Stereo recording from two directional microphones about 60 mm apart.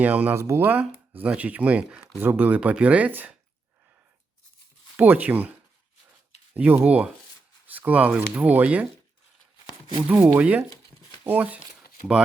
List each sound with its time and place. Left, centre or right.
0.0 s speech: right
0.3 s speech: right
0.6 s speech: right
2.6 s speech: centre
4.9 s speech: right
10.1 s speech: right